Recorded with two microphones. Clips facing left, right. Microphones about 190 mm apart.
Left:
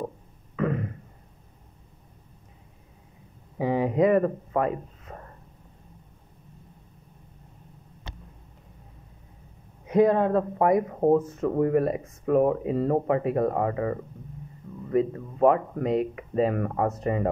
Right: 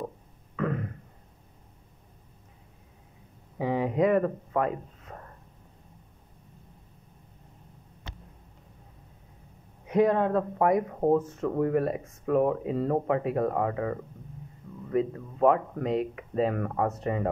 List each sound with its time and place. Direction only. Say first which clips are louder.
0.6 s a sound: left 3 dB; 10° left (ahead or behind)
3.5 s speech: left 3 dB; 5° left (ahead or behind)
5.1 s a sound: left 2 dB; 10° left (ahead or behind)
10.0 s speech: left 3 dB; 10° left (ahead or behind)
11.0 s speech: left 3 dB; 20° left (ahead or behind)
11.6 s speech: left 3 dB; 5° left (ahead or behind)